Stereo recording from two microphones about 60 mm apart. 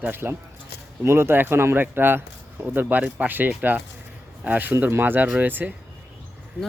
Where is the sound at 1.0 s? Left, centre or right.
Right.